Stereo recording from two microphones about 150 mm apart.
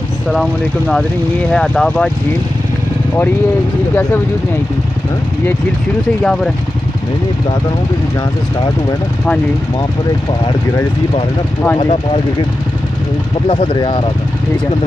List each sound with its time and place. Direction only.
0.3 s speech: 5° left (ahead or behind)
6.2 s speech: 5° left (ahead or behind)
11.8 s speech: 30° left (ahead or behind)
13.5 s speech: 35° left (ahead or behind)